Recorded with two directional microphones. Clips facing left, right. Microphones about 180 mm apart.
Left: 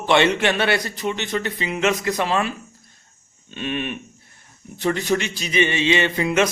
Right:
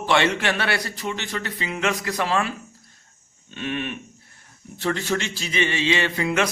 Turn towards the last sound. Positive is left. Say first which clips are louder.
# left 3 dB
turn(degrees=20)  # may be behind; listen again after turning